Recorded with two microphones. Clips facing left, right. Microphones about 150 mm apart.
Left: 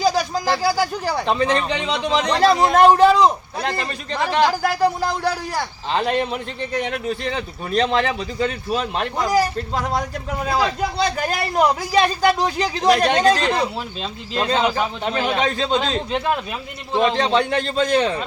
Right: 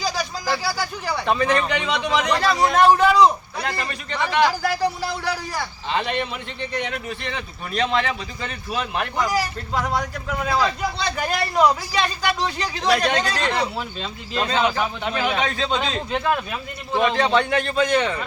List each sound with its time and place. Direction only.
0.0 s a sound: 50° left (ahead or behind)
0.6 s speech: 45° left (ahead or behind)
1.2 s speech: 25° left (ahead or behind)
2.7 s speech: 45° left (ahead or behind)
3.6 s a man's voice: 35° left (ahead or behind)
4.6 s speech: 50° left (ahead or behind)
5.9 s a man's voice: 40° left (ahead or behind)
9.2 s speech: 45° left (ahead or behind)
10.8 s speech: 45° left (ahead or behind)
13.5 s a man's voice: 30° left (ahead or behind)